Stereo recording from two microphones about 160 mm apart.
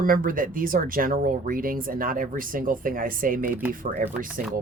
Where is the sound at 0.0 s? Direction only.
60° right (ahead or behind).